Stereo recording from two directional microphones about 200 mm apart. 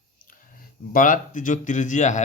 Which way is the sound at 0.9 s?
40° left (ahead or behind).